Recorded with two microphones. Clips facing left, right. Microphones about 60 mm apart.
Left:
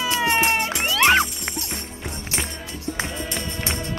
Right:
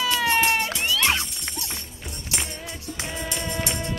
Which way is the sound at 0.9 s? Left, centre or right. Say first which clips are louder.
Left 8 dB; left.